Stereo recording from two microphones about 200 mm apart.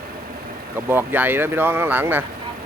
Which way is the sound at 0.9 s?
10° right (ahead or behind).